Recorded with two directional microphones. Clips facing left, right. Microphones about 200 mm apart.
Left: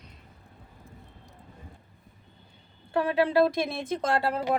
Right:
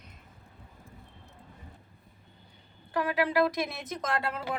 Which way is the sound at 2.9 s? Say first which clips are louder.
Left 4 dB; 30° left (ahead or behind).